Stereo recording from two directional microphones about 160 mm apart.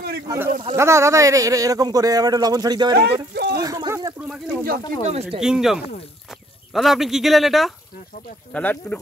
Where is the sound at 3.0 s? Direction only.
90° right.